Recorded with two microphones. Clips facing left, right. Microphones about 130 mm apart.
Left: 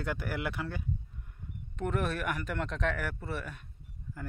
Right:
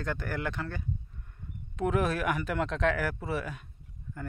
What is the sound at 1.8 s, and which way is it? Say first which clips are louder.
Speech: right 4 dB; 90° right.